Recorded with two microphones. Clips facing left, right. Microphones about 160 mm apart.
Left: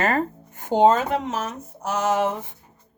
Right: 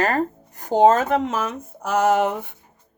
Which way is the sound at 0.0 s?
40° right (ahead or behind).